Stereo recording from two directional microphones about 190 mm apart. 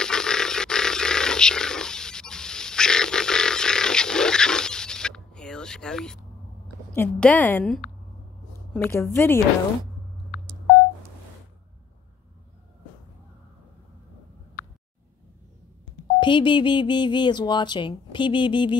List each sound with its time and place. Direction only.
0.0 s a sound: 5° left (ahead or behind)
7.0 s a woman's voice: 10° left (ahead or behind)
16.2 s speech: 25° left (ahead or behind)